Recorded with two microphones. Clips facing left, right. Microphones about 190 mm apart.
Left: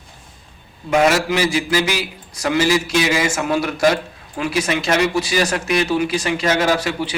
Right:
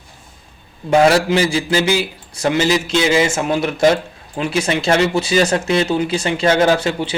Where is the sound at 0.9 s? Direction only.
30° right (ahead or behind).